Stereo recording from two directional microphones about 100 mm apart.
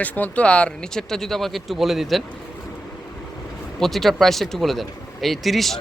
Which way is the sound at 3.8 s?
Centre (ahead or behind).